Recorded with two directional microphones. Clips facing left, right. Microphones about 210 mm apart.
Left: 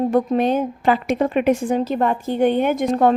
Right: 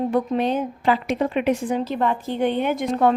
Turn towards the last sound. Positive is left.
turn(degrees=45)  # may be behind; listen again after turning